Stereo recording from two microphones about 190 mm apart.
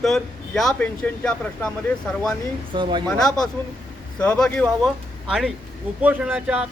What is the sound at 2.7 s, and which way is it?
Speech, 25° right (ahead or behind).